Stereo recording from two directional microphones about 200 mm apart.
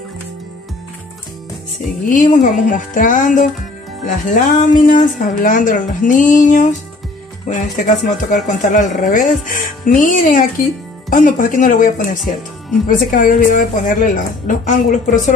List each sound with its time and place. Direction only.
2.0 s speech: 40° left (ahead or behind)